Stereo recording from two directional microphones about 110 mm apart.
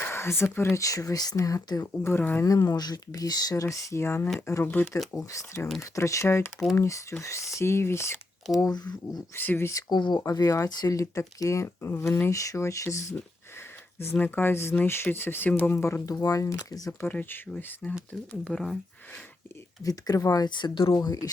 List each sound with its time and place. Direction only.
0.0 s speech: 25° left (ahead or behind)
1.8 s speech: 20° left (ahead or behind)
2.4 s speech: 30° left (ahead or behind)
5.1 s speech: 30° left (ahead or behind)
8.6 s speech: 40° left (ahead or behind)
9.3 s speech: 20° left (ahead or behind)
9.9 s speech: 40° left (ahead or behind)
10.2 s speech: 30° left (ahead or behind)
16.0 s speech: 30° left (ahead or behind)
17.1 s speech: 20° left (ahead or behind)
19.8 s speech: 35° left (ahead or behind)
21.0 s speech: 35° left (ahead or behind)